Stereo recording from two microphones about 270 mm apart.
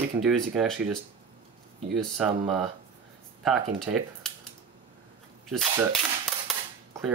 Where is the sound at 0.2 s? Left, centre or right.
Centre.